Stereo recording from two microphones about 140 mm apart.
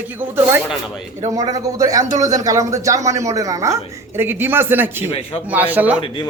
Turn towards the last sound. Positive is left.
turn(degrees=-10)  # may be behind; listen again after turning